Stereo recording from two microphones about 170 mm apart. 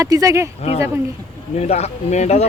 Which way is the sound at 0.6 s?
40° left (ahead or behind).